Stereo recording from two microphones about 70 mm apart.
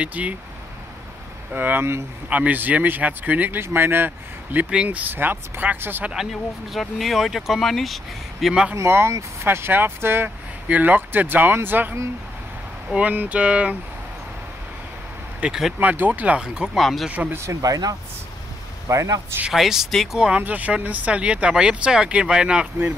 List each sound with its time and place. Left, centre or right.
0.0 s speech: right
1.5 s speech: right
6.7 s speech: centre
8.7 s speech: right; by 13.7 s centre
15.4 s speech: centre
15.8 s speech: right
16.7 s speech: centre
17.1 s speech: right
17.4 s speech: right
18.9 s a man's voice: right
19.5 s speech: centre
20.2 s speech: centre